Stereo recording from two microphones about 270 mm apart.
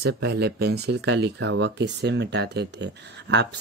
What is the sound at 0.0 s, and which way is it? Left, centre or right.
Speech, right.